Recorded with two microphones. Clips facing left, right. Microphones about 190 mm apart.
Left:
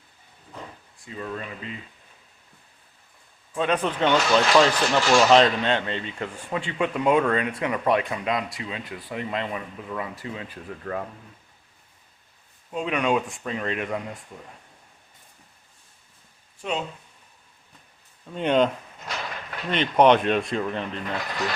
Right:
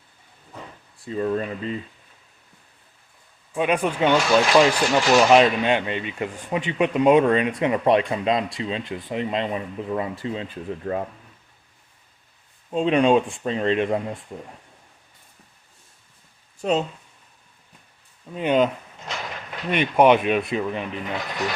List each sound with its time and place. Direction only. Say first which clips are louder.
1.0 s speech: right 9 dB; 35° right (ahead or behind)
3.5 s speech: right 2 dB; 15° right (ahead or behind)
12.7 s speech: right 6 dB; 30° right (ahead or behind)
16.6 s speech: right 7 dB; 35° right (ahead or behind)
18.3 s speech: right 1 dB; 5° right (ahead or behind)
19.7 s speech: right 1 dB; 10° right (ahead or behind)